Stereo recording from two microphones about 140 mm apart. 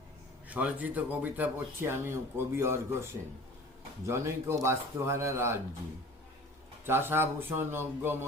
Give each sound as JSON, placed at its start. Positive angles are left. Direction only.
{"t": 0.4, "sound": "speech", "side_deg": -10}
{"t": 6.8, "sound": "speech", "side_deg": -15}